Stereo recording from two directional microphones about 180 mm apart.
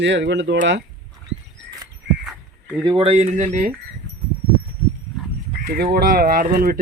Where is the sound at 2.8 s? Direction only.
30° right (ahead or behind).